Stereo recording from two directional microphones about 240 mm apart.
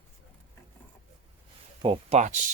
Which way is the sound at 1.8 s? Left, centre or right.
Right.